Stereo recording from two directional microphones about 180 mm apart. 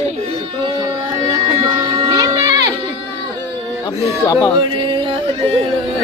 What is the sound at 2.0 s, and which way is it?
Music, 20° right (ahead or behind).